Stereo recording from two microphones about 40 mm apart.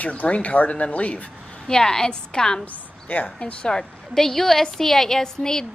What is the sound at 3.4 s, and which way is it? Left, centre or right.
Speech, left.